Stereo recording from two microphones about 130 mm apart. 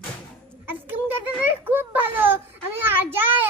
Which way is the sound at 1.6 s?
15° right (ahead or behind).